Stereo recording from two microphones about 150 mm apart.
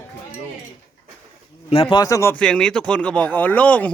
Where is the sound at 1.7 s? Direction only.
35° left (ahead or behind).